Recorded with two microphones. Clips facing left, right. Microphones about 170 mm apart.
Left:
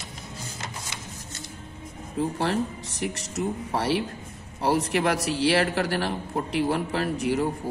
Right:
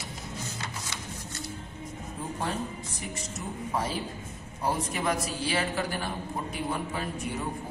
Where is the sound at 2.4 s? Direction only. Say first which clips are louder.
Left 6 dB; 80° left.